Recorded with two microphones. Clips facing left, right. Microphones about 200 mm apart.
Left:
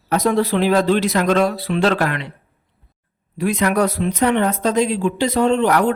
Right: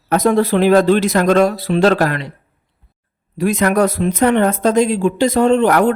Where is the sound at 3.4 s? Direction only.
45° right (ahead or behind).